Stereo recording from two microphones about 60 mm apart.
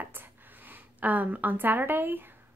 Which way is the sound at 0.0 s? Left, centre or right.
Right.